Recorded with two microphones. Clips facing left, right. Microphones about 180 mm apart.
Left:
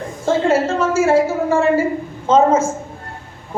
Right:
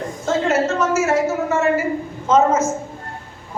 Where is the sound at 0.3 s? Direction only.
30° left (ahead or behind).